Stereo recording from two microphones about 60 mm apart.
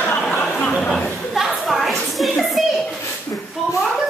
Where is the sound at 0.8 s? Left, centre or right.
Centre.